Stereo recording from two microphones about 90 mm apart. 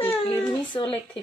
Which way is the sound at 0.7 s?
50° left (ahead or behind).